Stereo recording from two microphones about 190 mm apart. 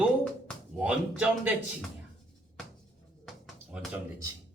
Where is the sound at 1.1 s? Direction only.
Centre (ahead or behind).